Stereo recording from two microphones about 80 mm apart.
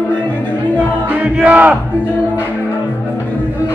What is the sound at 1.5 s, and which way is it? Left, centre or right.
Crowd, centre.